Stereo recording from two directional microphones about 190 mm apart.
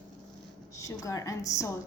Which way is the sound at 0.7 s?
15° left (ahead or behind).